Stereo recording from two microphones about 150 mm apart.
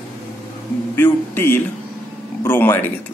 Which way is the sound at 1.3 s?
15° left (ahead or behind).